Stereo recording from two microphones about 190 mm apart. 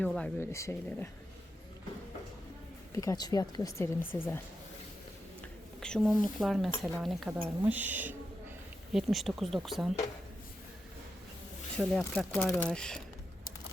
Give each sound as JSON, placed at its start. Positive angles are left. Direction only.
{"t": 0.0, "sound": "speech", "side_deg": 5}
{"t": 2.9, "sound": "speech", "side_deg": 15}
{"t": 5.4, "sound": "speech", "side_deg": 5}
{"t": 11.8, "sound": "speech", "side_deg": 5}